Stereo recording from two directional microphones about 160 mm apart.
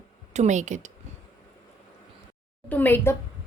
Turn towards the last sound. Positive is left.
turn(degrees=10)  # may be behind; listen again after turning